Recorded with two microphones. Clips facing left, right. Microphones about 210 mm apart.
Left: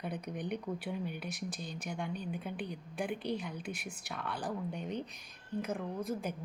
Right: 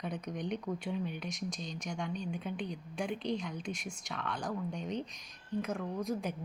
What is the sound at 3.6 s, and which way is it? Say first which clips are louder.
Speech: right 2 dB; 60° left (ahead or behind).